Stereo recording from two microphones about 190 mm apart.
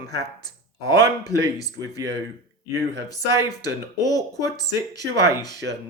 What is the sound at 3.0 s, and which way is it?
Speech, 20° left (ahead or behind).